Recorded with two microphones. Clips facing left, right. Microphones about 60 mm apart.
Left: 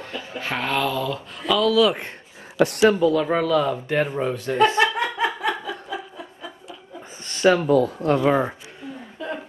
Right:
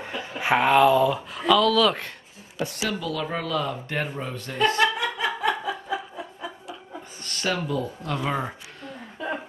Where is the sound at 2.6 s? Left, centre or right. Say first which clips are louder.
Left 11 dB; left.